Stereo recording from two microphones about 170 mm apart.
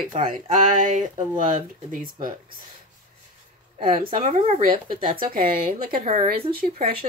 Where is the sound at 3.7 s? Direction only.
30° right (ahead or behind).